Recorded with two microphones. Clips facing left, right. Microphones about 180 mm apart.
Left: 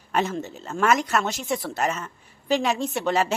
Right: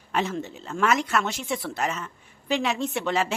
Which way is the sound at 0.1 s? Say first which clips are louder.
Left 2 dB; 45° left (ahead or behind).